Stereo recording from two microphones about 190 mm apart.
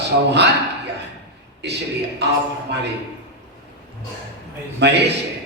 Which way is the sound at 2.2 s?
65° right (ahead or behind).